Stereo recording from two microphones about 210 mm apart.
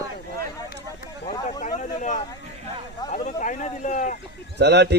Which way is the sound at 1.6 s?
35° left (ahead or behind).